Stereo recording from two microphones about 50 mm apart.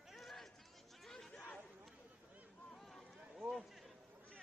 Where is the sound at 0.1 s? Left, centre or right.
Centre.